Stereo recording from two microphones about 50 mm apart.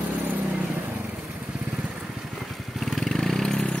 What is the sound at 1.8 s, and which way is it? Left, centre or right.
Vehicle, centre.